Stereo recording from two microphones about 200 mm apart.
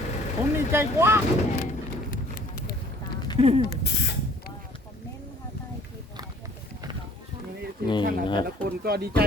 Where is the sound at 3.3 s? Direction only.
30° right (ahead or behind).